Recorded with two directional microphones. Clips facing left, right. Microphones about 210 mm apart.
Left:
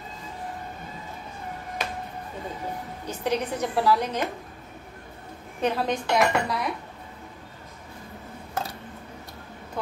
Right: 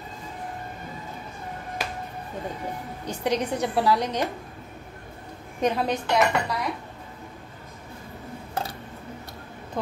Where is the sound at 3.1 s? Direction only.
15° right (ahead or behind).